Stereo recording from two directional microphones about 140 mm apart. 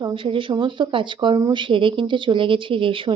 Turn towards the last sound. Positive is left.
turn(degrees=-40)  # may be behind; listen again after turning